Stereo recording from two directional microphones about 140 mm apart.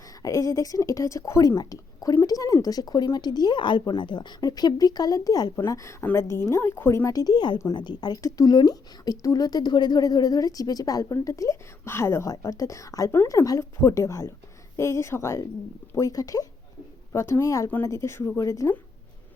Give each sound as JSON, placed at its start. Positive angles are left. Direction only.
{"t": 0.2, "sound": "speech", "side_deg": 25}